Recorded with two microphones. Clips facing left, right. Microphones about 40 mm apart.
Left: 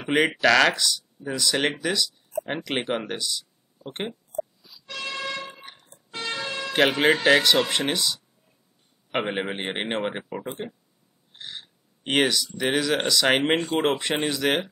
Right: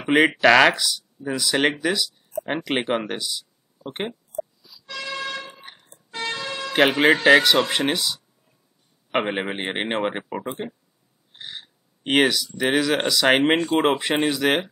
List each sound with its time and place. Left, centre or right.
0.0 s speech: centre
4.3 s music: left
5.6 s a sound: centre
5.9 s emergency vehicle: right
6.6 s speech: centre
11.3 s a sound: centre
12.5 s speech: centre